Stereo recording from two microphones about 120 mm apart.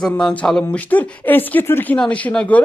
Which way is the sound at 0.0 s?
5° left (ahead or behind).